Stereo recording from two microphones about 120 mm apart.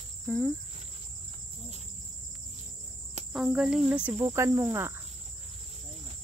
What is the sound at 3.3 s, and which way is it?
Speech, 5° right (ahead or behind).